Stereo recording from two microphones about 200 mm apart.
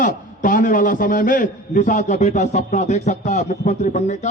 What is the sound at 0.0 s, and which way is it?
A man's voice, 40° left (ahead or behind).